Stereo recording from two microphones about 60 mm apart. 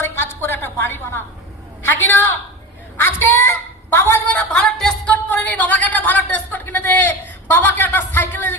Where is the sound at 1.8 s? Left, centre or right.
Left.